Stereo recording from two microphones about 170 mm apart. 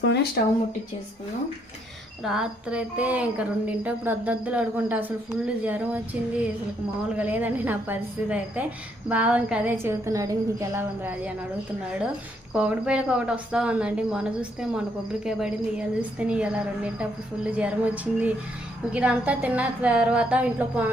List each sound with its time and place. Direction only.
0.0 s speech: 90° left
2.2 s speech: 5° right (ahead or behind)
7.1 s speech: 10° right (ahead or behind)
12.5 s speech: 5° right (ahead or behind)